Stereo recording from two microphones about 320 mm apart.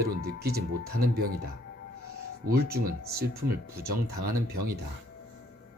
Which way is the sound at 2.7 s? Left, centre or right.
Right.